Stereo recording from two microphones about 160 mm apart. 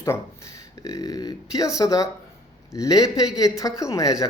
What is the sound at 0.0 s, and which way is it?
A man's voice, 20° left (ahead or behind).